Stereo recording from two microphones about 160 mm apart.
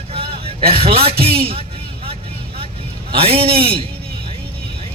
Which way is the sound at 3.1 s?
35° right (ahead or behind).